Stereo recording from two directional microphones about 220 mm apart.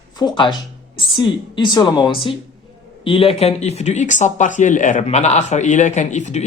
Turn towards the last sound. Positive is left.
turn(degrees=30)  # may be behind; listen again after turning